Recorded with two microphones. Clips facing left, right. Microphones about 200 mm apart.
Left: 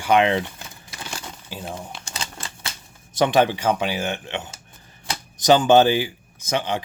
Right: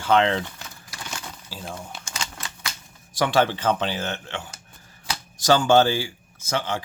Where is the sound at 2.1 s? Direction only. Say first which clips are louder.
Left 1 dB; 30° left (ahead or behind); by 4.4 s 15° left (ahead or behind).